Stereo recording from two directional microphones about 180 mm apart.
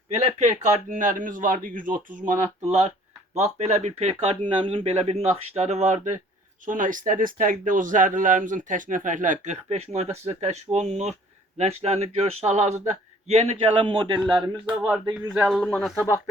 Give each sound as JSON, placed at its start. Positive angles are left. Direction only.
{"t": 0.1, "sound": "speech", "side_deg": -40}
{"t": 3.3, "sound": "a man's voice", "side_deg": -40}
{"t": 14.7, "sound": "speech", "side_deg": -5}